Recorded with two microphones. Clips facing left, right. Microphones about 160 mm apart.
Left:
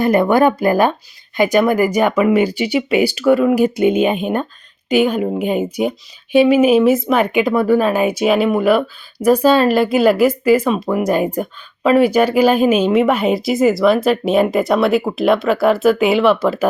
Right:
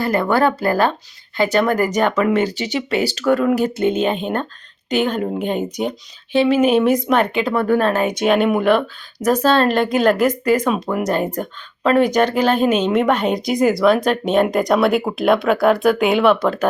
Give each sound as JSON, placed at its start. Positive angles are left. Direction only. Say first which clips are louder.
{"t": 0.0, "sound": "speech", "louder": "left 4 dB", "side_deg": 20}